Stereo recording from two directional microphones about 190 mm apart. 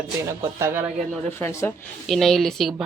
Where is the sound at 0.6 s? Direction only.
10° right (ahead or behind).